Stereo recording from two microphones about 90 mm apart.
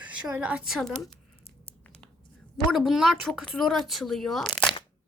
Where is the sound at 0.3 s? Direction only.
15° right (ahead or behind).